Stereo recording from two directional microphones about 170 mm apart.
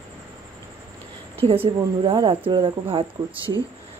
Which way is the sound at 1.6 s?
30° right (ahead or behind).